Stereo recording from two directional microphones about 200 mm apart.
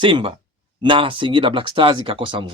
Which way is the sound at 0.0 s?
25° right (ahead or behind).